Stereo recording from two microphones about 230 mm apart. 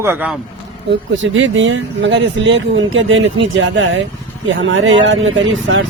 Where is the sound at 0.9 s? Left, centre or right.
Right.